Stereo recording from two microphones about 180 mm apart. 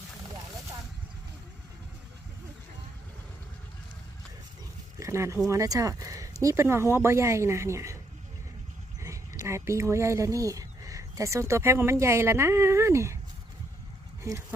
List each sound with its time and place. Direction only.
4.9 s speech: 15° right (ahead or behind)
9.4 s speech: 15° right (ahead or behind)
14.3 s speech: 15° right (ahead or behind)